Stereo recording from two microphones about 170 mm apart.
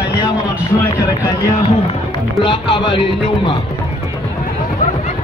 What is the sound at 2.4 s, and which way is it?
Speech, 30° left (ahead or behind).